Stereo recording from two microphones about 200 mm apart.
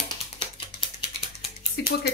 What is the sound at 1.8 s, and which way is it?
Speech, 55° left (ahead or behind).